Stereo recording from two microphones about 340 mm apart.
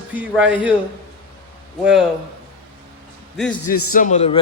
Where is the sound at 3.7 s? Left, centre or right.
Left.